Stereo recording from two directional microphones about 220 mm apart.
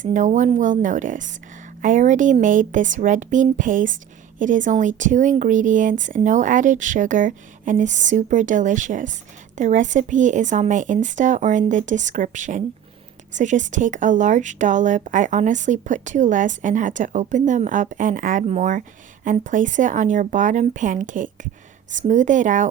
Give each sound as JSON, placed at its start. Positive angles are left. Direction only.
{"t": 0.0, "sound": "a woman's voice", "side_deg": -35}